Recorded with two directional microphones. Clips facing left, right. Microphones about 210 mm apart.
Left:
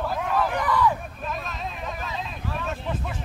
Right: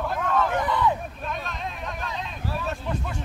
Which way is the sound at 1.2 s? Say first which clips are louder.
Even; centre (ahead or behind).